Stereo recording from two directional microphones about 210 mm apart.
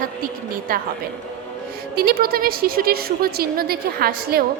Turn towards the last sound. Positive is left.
turn(degrees=-45)  # may be behind; listen again after turning